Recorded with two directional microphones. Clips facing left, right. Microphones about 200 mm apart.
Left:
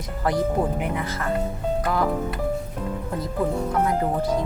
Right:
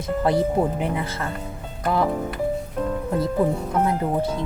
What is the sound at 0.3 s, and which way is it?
Speech, 30° right (ahead or behind).